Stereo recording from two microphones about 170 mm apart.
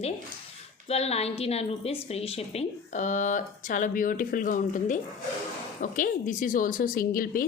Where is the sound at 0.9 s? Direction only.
40° left (ahead or behind).